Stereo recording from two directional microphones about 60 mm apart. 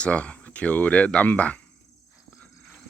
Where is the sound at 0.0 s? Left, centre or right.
Centre.